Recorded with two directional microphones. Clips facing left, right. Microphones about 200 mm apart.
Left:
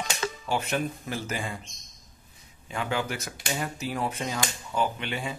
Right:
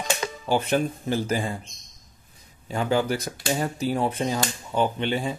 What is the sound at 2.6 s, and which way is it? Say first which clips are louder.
Speech: right 7 dB; 35° right (ahead or behind).